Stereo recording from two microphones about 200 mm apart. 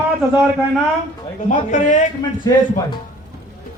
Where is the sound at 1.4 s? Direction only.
40° left (ahead or behind).